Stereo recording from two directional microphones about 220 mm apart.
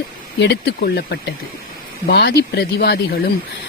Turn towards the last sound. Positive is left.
turn(degrees=45)  # may be behind; listen again after turning